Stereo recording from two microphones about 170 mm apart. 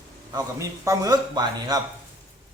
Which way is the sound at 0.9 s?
20° right (ahead or behind).